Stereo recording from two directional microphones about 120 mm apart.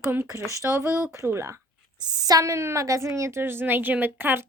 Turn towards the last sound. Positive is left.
turn(degrees=-20)  # may be behind; listen again after turning